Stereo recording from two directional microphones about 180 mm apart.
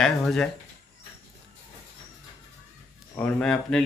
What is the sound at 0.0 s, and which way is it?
Speech, 5° left (ahead or behind).